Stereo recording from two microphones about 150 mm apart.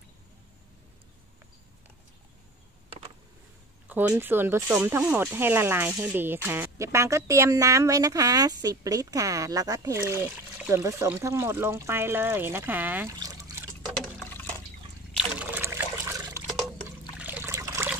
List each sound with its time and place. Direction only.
3.8 s speech: 10° right (ahead or behind)
13.1 s trickle: 25° right (ahead or behind)
15.1 s a sound: 10° right (ahead or behind)
15.7 s water: 20° right (ahead or behind)
17.2 s trickle: 15° right (ahead or behind)